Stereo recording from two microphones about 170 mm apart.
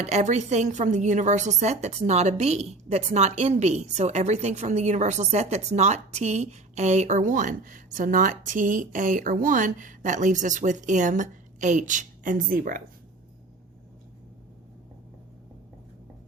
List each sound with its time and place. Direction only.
0.0 s a woman's voice: 40° right (ahead or behind)